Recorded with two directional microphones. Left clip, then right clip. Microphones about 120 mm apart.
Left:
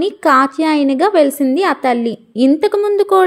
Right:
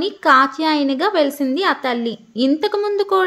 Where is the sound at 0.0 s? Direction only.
40° left (ahead or behind).